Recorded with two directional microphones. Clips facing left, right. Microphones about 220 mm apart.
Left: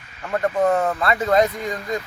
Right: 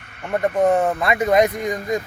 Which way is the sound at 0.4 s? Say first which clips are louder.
Right 2 dB; 20° right (ahead or behind).